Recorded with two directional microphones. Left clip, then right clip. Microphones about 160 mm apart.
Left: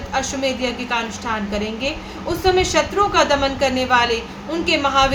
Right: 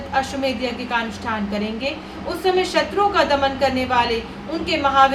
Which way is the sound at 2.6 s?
20° left (ahead or behind).